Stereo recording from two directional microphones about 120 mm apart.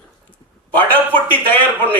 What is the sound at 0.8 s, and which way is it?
Speech, 15° left (ahead or behind).